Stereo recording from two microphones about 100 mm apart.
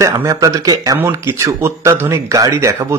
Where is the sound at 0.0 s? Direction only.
35° right (ahead or behind).